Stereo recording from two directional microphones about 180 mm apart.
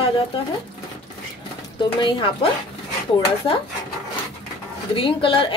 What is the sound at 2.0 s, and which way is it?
Speech, 30° left (ahead or behind).